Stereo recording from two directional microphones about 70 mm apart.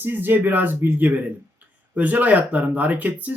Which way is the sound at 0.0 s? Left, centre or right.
Right.